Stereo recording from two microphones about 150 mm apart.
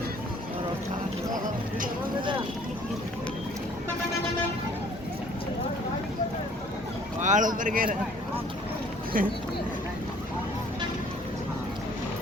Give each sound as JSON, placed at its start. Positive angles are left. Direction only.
{"t": 7.2, "sound": "speech", "side_deg": -55}
{"t": 9.1, "sound": "speech", "side_deg": -70}